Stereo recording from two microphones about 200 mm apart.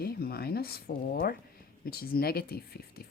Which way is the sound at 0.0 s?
50° left (ahead or behind).